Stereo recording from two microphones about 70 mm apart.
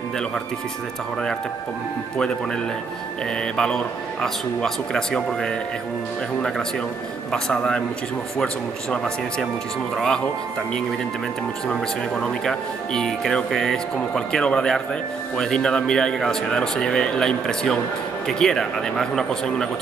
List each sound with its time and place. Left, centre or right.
3.5 s speech: centre
7.3 s speech: centre
8.9 s speech: centre
11.6 s speech: centre